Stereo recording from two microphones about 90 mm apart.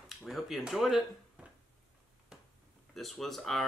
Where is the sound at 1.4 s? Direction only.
10° right (ahead or behind).